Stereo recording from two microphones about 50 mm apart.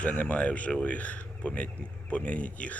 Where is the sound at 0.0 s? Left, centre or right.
Left.